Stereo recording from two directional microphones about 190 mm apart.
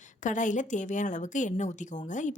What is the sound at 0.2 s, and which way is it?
A woman's voice, 40° left (ahead or behind).